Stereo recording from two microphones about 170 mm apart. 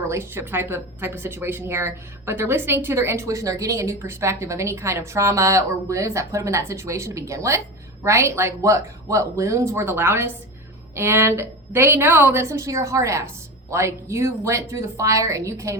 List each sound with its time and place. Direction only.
0.1 s a woman's voice: 15° right (ahead or behind)